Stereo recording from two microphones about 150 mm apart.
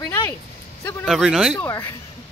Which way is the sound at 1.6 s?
15° left (ahead or behind).